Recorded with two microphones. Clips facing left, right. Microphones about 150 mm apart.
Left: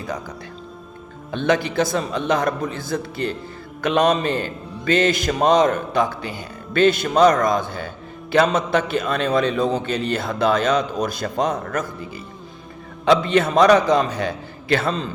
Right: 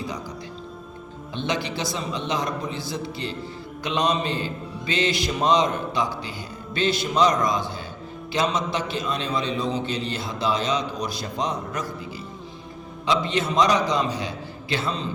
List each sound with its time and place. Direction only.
1.3 s a man's voice: 55° left (ahead or behind)
13.1 s a man's voice: 60° left (ahead or behind)